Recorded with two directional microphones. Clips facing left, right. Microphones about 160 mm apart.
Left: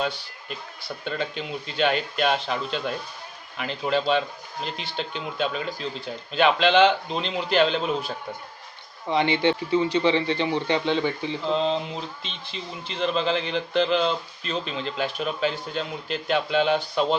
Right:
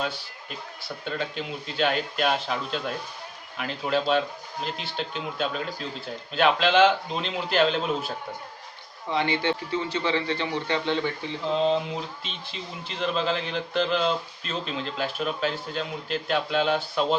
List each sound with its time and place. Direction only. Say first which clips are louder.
1.0 s a man's voice: left 1 dB; 5° right (ahead or behind)
9.0 s speech: left 4 dB; 20° left (ahead or behind)
12.2 s a man's voice: left 1 dB; 5° right (ahead or behind)